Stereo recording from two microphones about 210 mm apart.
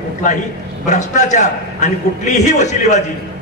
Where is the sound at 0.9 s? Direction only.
35° left (ahead or behind).